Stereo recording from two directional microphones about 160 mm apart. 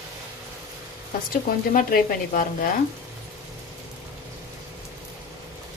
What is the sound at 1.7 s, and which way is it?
Speech, 60° left (ahead or behind).